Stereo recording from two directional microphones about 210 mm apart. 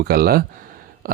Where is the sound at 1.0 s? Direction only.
45° right (ahead or behind).